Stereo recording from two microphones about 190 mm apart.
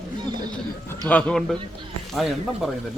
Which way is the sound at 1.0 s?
5° left (ahead or behind).